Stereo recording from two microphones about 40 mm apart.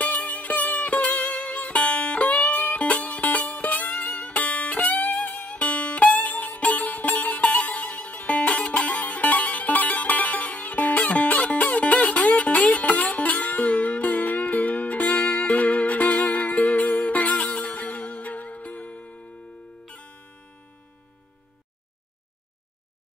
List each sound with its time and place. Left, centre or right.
0.3 s music: left
2.6 s music: left
8.6 s music: left
19.9 s music: left